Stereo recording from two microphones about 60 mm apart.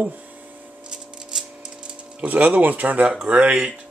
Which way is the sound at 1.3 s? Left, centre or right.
Centre.